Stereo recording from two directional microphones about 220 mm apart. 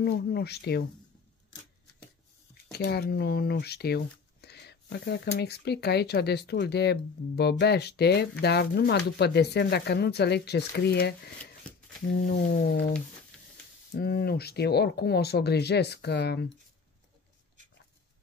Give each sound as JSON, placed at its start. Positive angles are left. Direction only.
{"t": 0.0, "sound": "speech", "side_deg": 45}
{"t": 2.5, "sound": "speech", "side_deg": 45}
{"t": 13.9, "sound": "speech", "side_deg": 45}